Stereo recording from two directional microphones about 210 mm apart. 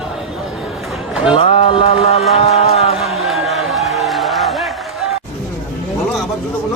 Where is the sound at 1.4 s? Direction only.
30° left (ahead or behind).